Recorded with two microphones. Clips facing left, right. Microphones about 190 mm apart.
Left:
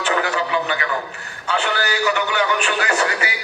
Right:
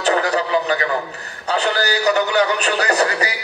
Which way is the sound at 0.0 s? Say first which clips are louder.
Right 3 dB; 35° right (ahead or behind).